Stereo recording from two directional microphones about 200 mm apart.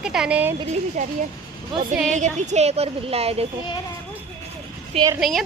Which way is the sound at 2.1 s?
35° right (ahead or behind).